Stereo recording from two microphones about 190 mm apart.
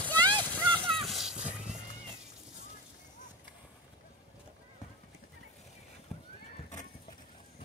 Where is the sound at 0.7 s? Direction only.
25° right (ahead or behind).